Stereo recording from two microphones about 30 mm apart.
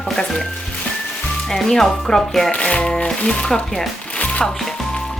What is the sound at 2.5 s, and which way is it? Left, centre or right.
Speech, left.